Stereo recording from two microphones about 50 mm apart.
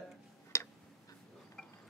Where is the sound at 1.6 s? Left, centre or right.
Centre.